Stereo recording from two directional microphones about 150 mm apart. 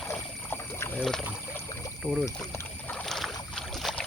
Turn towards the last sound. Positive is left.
turn(degrees=0)  # may be behind; listen again after turning